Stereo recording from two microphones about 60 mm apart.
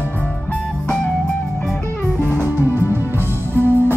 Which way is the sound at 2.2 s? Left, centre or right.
Right.